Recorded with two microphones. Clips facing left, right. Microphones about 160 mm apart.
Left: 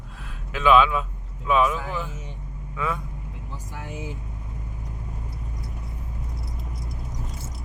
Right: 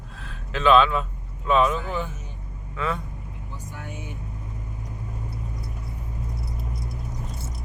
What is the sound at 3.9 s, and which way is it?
Vehicle, 90° left.